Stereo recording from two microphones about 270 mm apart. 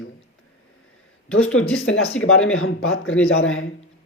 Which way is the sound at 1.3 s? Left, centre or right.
Left.